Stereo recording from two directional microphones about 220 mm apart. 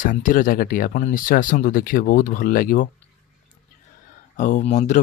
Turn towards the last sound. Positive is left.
turn(degrees=35)  # may be behind; listen again after turning